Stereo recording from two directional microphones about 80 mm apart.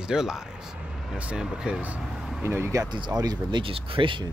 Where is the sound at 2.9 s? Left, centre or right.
Right.